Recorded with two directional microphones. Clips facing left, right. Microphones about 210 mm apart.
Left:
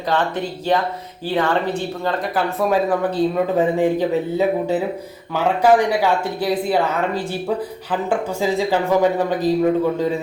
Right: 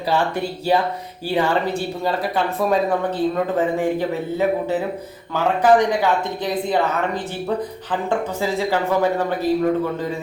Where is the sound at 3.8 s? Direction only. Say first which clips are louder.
Left 3 dB; 15° left (ahead or behind).